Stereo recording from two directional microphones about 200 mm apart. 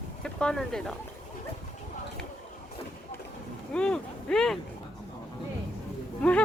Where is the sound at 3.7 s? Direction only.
5° left (ahead or behind).